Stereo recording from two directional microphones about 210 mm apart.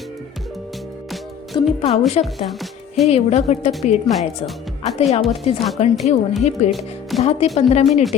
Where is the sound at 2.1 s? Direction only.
30° left (ahead or behind).